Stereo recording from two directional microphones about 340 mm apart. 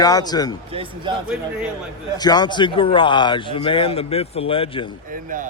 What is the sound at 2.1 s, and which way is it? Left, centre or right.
Speech, centre.